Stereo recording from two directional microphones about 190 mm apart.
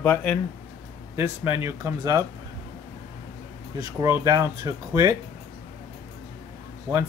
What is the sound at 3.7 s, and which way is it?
Speech, 15° right (ahead or behind).